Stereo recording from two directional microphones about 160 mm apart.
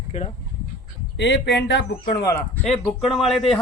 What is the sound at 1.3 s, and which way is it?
Speech, 90° left.